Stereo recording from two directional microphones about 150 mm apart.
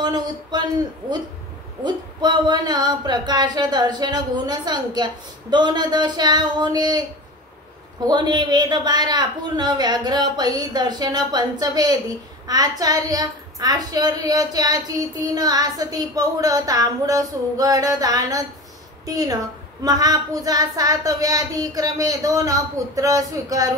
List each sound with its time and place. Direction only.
0.0 s speech: 30° right (ahead or behind)
1.9 s a woman's voice: 30° right (ahead or behind)
8.1 s a woman's voice: 30° right (ahead or behind)